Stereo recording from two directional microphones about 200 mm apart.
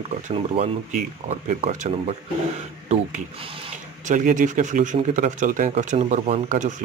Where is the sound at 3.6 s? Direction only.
40° right (ahead or behind).